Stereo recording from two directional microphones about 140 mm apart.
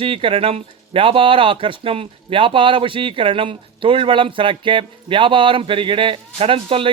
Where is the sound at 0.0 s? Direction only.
40° right (ahead or behind).